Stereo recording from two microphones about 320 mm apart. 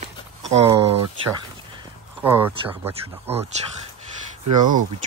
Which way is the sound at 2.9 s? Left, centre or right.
Centre.